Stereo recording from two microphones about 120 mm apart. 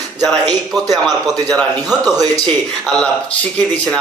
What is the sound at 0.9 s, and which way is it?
Speech, 30° right (ahead or behind).